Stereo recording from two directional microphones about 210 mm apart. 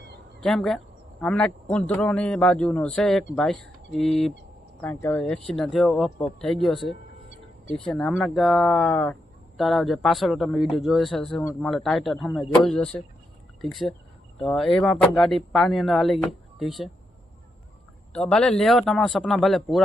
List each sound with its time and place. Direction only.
0.3 s speech: centre (ahead or behind)
18.1 s speech: 5° left (ahead or behind)